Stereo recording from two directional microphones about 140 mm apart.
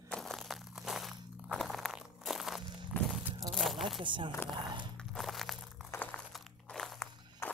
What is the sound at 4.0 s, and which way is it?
Speech, 35° right (ahead or behind).